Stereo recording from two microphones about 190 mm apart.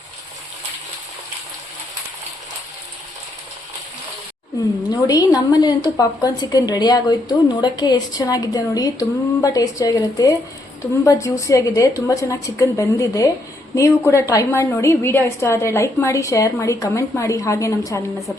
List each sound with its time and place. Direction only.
4.9 s a woman's voice: 20° left (ahead or behind)